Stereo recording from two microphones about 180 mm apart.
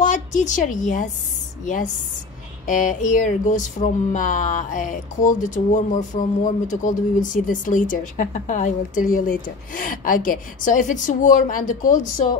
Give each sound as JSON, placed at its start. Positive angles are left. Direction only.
{"t": 0.0, "sound": "a woman's voice", "side_deg": 45}
{"t": 2.6, "sound": "speech", "side_deg": 45}